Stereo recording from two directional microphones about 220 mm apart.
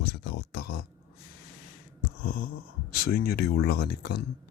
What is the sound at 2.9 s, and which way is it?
Speech, 40° left (ahead or behind).